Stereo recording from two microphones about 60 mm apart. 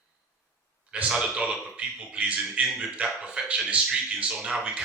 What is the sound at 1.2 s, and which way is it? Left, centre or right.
A man's voice, centre.